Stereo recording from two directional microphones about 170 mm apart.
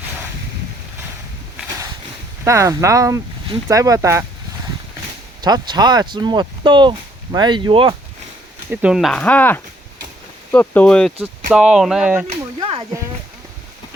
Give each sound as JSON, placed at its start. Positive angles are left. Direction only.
{"t": 2.4, "sound": "speech", "side_deg": -20}
{"t": 5.4, "sound": "speech", "side_deg": -25}
{"t": 8.7, "sound": "speech", "side_deg": -5}
{"t": 12.5, "sound": "a sound", "side_deg": -30}